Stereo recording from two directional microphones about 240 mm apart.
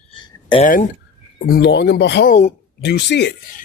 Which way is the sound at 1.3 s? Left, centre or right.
Left.